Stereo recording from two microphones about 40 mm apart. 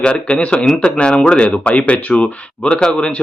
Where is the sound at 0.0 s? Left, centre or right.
Left.